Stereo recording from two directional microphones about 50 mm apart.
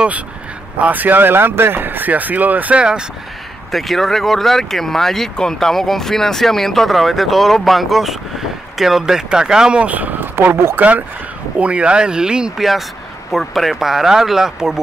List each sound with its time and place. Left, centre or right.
0.7 s speech: right
2.7 s speech: centre
3.7 s speech: centre
9.8 s speech: right
10.8 s speech: right
12.5 s speech: centre